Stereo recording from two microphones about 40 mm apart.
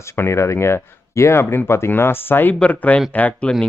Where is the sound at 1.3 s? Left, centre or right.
Left.